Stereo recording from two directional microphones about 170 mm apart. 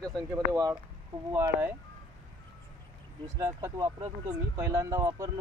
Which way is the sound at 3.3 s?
15° right (ahead or behind).